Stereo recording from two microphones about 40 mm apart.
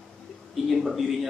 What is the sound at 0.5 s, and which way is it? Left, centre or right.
Speech, centre.